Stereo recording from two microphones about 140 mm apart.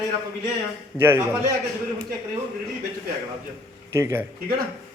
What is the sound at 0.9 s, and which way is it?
Speech, 15° right (ahead or behind).